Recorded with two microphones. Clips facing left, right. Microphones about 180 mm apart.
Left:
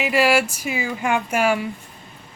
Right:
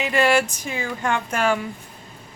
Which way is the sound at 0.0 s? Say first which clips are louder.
Left 1 dB; 5° left (ahead or behind).